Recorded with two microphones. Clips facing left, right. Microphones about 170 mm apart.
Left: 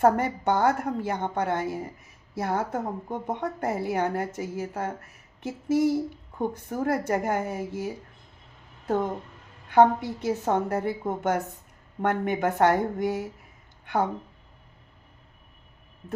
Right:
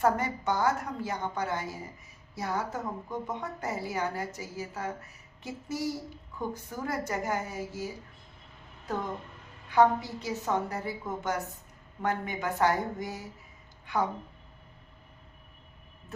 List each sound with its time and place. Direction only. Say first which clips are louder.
0.0 s a woman's voice: left 5 dB; 55° left (ahead or behind)
9.6 s a woman's voice: left 4 dB; 55° left (ahead or behind)